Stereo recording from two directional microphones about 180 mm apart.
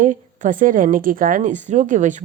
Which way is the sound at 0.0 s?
45° right (ahead or behind).